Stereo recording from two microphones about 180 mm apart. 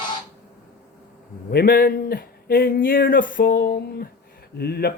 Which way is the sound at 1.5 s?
55° left (ahead or behind).